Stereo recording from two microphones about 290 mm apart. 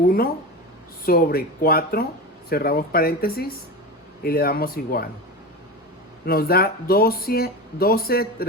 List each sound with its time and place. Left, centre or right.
1.0 s speech: left
6.2 s speech: left